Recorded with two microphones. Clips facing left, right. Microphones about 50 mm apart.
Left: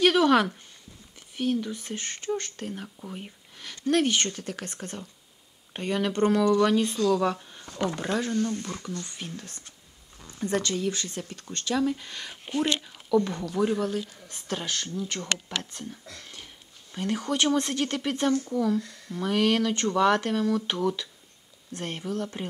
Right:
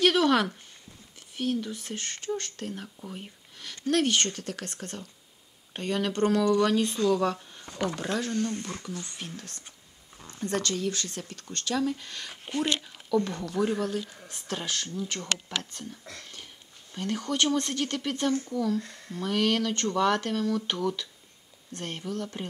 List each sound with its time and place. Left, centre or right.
0.0 s a sound: centre
1.3 s speech: centre
10.2 s speech: centre
16.2 s a sound: centre
16.9 s speech: centre
18.8 s speech: right
19.1 s speech: centre